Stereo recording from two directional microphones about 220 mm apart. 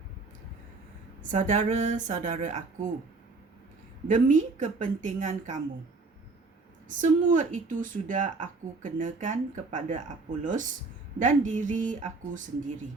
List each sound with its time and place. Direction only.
1.2 s speech: 35° right (ahead or behind)
4.1 s speech: 35° right (ahead or behind)
6.8 s speech: 35° right (ahead or behind)